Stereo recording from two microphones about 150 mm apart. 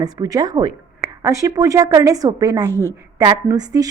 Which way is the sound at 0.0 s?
25° right (ahead or behind).